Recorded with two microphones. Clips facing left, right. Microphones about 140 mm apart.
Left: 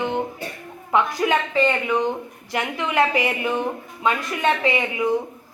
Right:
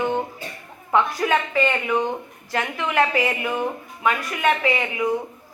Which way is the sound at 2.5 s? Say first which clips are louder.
Even; 20° left (ahead or behind).